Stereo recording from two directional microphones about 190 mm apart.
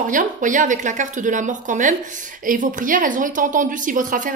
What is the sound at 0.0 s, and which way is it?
Speech, 45° right (ahead or behind).